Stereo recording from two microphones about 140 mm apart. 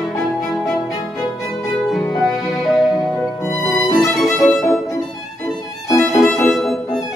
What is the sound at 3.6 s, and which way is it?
Violin, 20° left (ahead or behind).